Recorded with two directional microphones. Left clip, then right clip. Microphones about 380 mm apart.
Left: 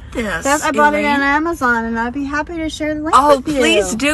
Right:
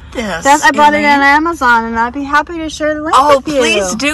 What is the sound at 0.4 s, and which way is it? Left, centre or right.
A woman's voice, right.